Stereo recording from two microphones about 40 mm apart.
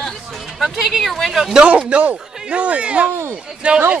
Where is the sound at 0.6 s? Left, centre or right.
Centre.